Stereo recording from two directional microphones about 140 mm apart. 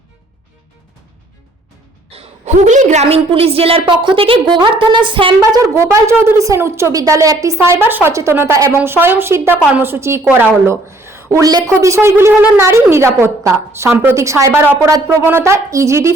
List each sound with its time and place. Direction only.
2.0 s a woman's voice: 50° right (ahead or behind); by 16.1 s 20° right (ahead or behind)